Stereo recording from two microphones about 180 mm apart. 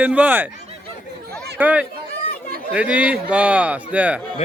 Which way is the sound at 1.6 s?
10° right (ahead or behind).